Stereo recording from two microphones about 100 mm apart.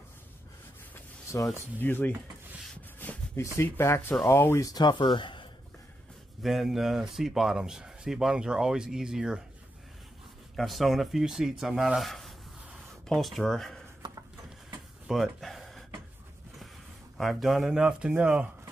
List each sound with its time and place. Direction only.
0.9 s speech: 30° left (ahead or behind)
3.0 s a sound: 20° left (ahead or behind)
3.5 s speech: 25° left (ahead or behind)
4.6 s speech: 45° left (ahead or behind)
6.4 s speech: centre (ahead or behind)
10.5 s speech: centre (ahead or behind)
14.0 s a sound: 55° right (ahead or behind)
15.0 s a sound: centre (ahead or behind)
17.2 s speech: centre (ahead or behind)